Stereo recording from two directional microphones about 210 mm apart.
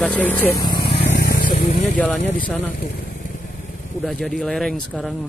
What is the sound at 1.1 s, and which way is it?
Vehicle, 45° left (ahead or behind).